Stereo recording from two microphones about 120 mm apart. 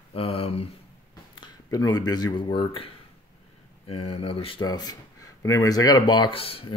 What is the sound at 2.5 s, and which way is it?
Speech, 45° left (ahead or behind).